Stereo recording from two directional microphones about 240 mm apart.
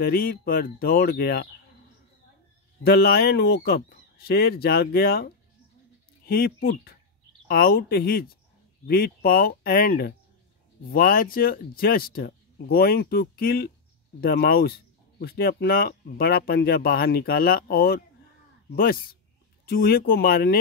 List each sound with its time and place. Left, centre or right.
0.0 s speech: left
2.8 s speech: left
19.6 s speech: left